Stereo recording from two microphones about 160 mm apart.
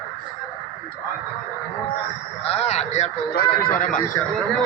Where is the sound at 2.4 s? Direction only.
40° left (ahead or behind).